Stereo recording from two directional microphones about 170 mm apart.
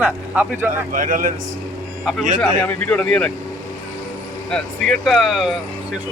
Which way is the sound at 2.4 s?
10° left (ahead or behind).